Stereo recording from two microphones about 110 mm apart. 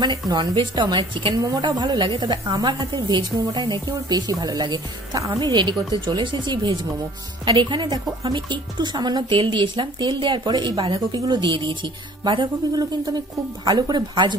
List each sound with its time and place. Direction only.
0.0 s a woman's voice: 40° right (ahead or behind)
13.7 s a woman's voice: 40° right (ahead or behind)